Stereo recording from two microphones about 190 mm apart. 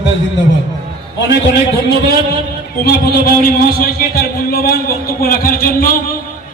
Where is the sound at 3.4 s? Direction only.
50° left (ahead or behind).